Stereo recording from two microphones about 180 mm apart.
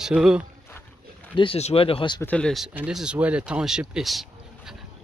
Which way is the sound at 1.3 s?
30° left (ahead or behind).